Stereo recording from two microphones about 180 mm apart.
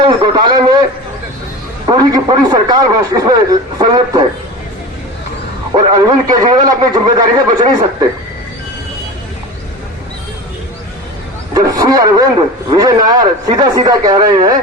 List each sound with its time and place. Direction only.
0.0 s a man's voice: 25° right (ahead or behind)
1.9 s a man's voice: 20° right (ahead or behind)
5.7 s a man's voice: 25° right (ahead or behind)
11.5 s vehicle: 20° right (ahead or behind)
12.7 s a man's voice: 20° right (ahead or behind)